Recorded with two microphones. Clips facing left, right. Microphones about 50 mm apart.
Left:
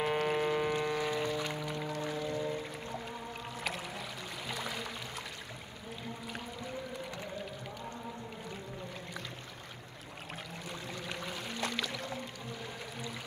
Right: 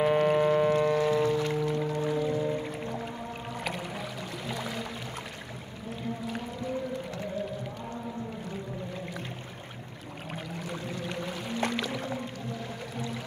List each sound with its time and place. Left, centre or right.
0.0 s music: centre
3.5 s music: centre
10.3 s a sound: centre
11.7 s music: centre